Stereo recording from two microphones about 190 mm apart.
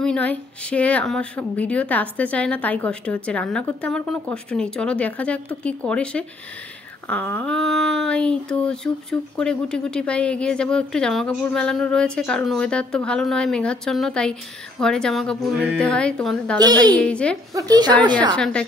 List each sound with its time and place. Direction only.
0.0 s a woman's voice: 5° left (ahead or behind)
16.5 s a woman's voice: 20° right (ahead or behind)
17.0 s a woman's voice: 5° left (ahead or behind)
17.6 s a woman's voice: 20° right (ahead or behind)
18.3 s a woman's voice: 5° left (ahead or behind)